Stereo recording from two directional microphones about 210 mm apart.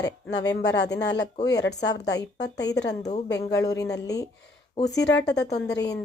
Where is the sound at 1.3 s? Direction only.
20° left (ahead or behind).